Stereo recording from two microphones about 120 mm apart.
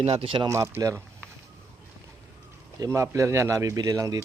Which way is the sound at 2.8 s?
25° right (ahead or behind).